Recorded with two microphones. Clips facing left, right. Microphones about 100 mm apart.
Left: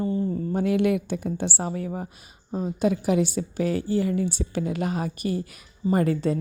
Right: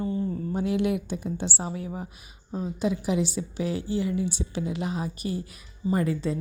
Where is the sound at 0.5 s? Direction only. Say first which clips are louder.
Left 4 dB; 55° left (ahead or behind).